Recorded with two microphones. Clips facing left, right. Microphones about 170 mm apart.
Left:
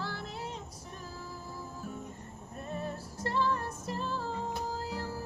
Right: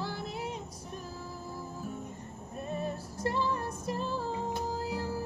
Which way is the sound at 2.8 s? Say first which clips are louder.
Right 4 dB; 15° right (ahead or behind).